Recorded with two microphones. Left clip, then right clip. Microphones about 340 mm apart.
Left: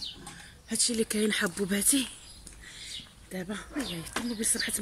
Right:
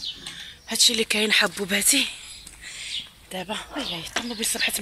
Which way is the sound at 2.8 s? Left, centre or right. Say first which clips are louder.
Right 10 dB; right.